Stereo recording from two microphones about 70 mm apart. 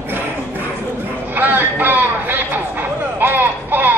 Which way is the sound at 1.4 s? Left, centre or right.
Right.